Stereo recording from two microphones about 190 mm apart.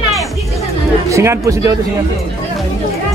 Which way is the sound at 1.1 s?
15° right (ahead or behind).